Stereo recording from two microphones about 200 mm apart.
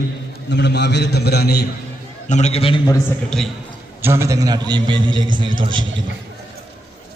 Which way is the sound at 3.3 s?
Centre (ahead or behind).